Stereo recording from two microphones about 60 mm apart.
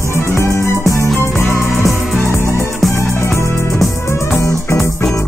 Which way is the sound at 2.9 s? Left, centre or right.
Left.